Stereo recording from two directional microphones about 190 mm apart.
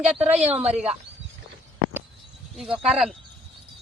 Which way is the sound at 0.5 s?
35° right (ahead or behind).